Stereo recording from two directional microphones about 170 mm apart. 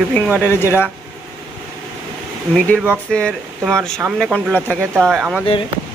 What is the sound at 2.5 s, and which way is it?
Speech, 5° left (ahead or behind).